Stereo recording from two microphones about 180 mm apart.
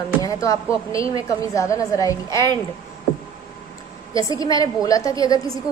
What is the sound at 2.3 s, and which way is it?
Speech, 25° right (ahead or behind).